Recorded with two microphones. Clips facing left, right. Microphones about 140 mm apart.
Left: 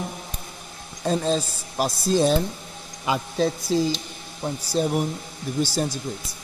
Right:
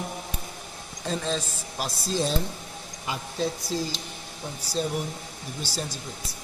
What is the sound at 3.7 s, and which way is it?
Speech, 75° left (ahead or behind).